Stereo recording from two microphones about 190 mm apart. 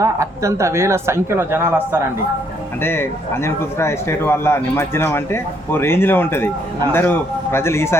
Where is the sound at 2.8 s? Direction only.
10° left (ahead or behind).